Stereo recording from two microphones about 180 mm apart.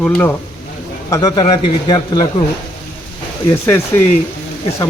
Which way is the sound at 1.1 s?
25° left (ahead or behind).